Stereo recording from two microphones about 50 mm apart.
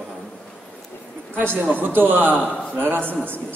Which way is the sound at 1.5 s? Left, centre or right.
Right.